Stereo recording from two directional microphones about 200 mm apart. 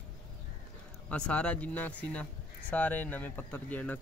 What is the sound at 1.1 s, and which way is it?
Speech, 5° left (ahead or behind).